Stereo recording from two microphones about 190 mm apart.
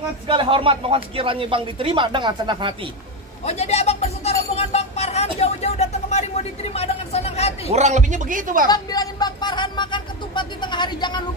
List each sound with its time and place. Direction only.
0.3 s speech: 25° right (ahead or behind)
3.4 s speech: 35° left (ahead or behind)
4.6 s a sound: 35° left (ahead or behind)
7.7 s a man's voice: 40° right (ahead or behind)
8.6 s speech: 20° left (ahead or behind)